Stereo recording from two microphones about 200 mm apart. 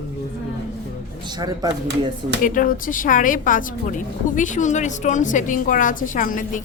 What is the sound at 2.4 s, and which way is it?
A woman's voice, 40° left (ahead or behind).